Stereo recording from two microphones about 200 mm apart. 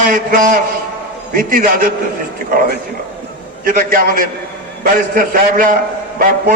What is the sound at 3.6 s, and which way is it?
A man's voice, 45° right (ahead or behind).